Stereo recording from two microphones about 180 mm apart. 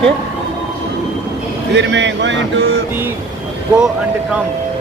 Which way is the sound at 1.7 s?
80° right.